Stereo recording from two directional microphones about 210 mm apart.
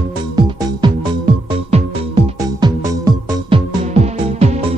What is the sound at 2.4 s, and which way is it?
Music, 15° right (ahead or behind).